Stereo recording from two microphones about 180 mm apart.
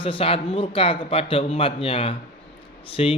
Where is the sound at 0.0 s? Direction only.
30° left (ahead or behind).